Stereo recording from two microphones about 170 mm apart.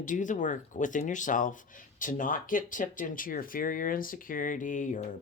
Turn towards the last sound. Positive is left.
turn(degrees=45)  # may be behind; listen again after turning